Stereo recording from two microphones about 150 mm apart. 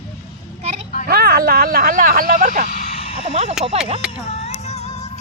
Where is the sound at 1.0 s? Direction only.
90° right; by 2.6 s 60° right (ahead or behind).